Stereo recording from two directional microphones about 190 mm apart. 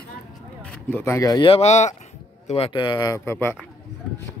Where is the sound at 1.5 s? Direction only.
35° left (ahead or behind); by 3.5 s 15° left (ahead or behind).